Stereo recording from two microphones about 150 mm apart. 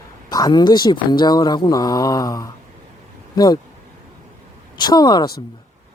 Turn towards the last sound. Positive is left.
turn(degrees=25)  # may be behind; listen again after turning